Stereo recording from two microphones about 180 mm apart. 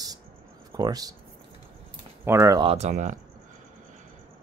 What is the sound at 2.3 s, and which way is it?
Speech, 15° right (ahead or behind).